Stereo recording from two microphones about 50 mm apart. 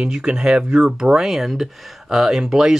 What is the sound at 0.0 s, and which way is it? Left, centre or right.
Speech, centre.